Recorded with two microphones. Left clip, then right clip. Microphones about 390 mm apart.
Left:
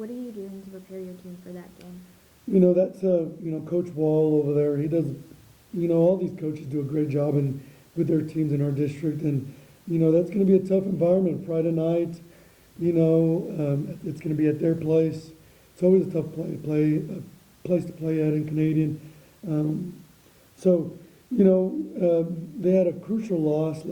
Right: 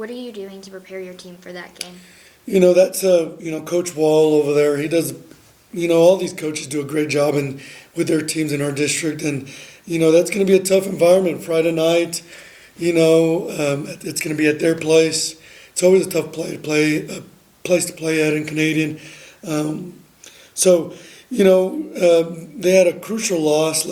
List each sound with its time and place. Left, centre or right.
0.9 s speech: centre
3.9 s mantra: right
4.4 s speech: centre